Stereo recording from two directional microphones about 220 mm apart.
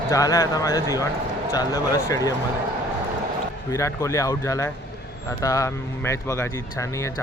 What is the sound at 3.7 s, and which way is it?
Speech, 15° left (ahead or behind).